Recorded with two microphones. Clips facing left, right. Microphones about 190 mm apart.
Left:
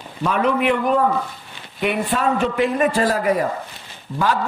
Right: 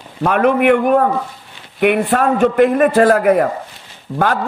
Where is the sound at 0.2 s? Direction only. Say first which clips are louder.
Right 6 dB; 60° right (ahead or behind).